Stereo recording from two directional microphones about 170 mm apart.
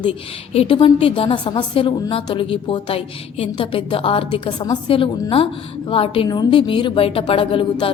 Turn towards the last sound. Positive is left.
turn(degrees=30)  # may be behind; listen again after turning